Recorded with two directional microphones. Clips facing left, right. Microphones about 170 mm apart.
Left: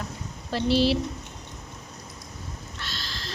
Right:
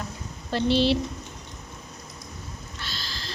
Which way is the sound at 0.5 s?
5° left (ahead or behind).